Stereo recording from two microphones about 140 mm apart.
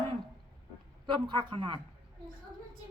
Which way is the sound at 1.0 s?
35° right (ahead or behind).